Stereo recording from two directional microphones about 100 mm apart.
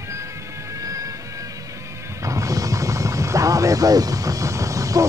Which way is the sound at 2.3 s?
35° right (ahead or behind).